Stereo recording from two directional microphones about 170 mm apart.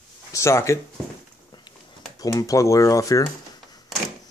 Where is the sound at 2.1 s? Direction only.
20° left (ahead or behind).